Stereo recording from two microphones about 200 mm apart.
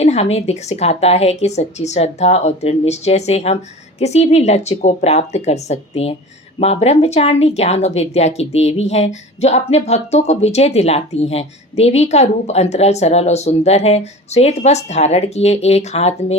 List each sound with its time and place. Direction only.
0.0 s speech: 30° left (ahead or behind)